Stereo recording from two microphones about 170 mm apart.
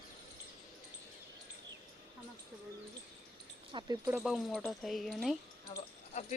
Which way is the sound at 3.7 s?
20° right (ahead or behind).